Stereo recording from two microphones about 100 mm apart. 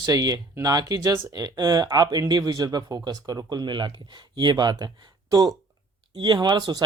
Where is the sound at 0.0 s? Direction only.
35° right (ahead or behind).